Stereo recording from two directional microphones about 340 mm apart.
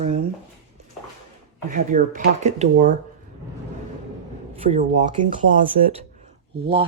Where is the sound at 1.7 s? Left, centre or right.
Right.